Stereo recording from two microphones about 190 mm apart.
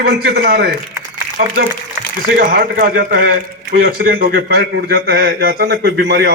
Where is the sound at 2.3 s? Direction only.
55° right (ahead or behind).